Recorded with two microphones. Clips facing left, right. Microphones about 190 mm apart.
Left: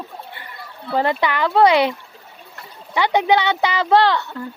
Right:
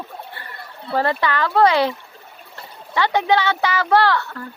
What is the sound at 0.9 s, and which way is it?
Speech, 15° left (ahead or behind).